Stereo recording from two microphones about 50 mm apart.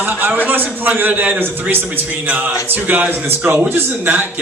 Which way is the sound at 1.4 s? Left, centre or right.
Right.